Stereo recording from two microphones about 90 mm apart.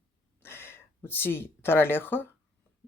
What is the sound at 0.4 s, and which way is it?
Speech, 25° left (ahead or behind).